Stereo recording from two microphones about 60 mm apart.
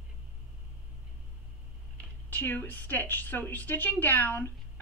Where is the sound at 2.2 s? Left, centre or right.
Left.